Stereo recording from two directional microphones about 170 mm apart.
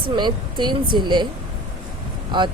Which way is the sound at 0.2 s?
25° right (ahead or behind).